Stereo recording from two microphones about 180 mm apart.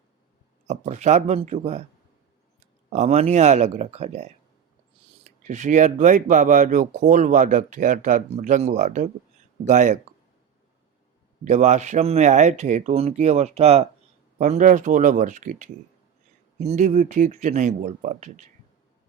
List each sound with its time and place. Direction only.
0.7 s speech: 40° right (ahead or behind)
2.9 s speech: 40° right (ahead or behind)
5.4 s speech: 40° right (ahead or behind)
11.4 s speech: 40° right (ahead or behind)